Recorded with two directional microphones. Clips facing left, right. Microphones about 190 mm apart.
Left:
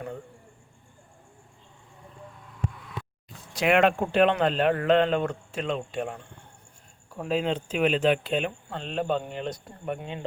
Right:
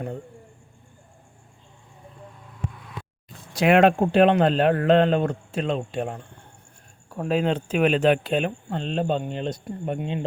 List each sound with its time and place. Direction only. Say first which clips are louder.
3.5 s speech: right 4 dB; 35° right (ahead or behind)
7.1 s speech: right 4 dB; 55° right (ahead or behind); by 10.2 s 25° right (ahead or behind)